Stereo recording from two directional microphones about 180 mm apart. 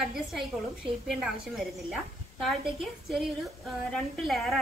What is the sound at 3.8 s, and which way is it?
Speech, centre (ahead or behind).